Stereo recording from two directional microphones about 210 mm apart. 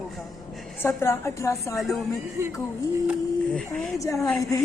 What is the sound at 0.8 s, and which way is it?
Speech, 10° left (ahead or behind).